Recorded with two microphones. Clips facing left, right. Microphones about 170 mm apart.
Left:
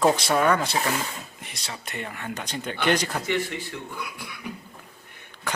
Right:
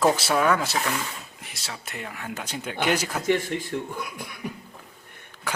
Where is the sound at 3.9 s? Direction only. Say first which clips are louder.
Right 2 dB; 45° right (ahead or behind).